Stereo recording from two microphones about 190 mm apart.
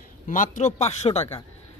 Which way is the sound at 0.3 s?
40° left (ahead or behind).